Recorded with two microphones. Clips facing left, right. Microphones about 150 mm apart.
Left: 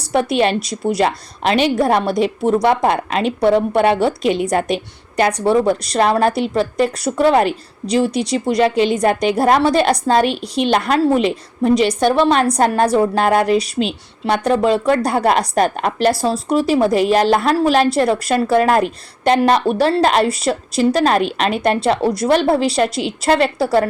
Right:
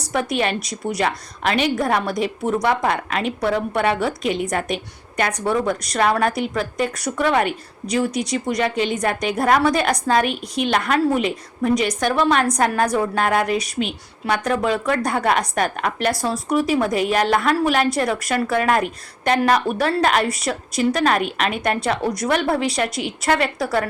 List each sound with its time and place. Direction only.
0.0 s a woman's voice: 30° left (ahead or behind)